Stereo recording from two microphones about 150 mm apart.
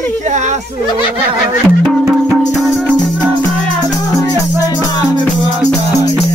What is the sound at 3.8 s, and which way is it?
Music, 20° right (ahead or behind).